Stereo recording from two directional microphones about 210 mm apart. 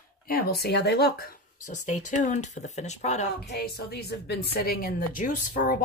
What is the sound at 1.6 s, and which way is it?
A woman's voice, 35° left (ahead or behind).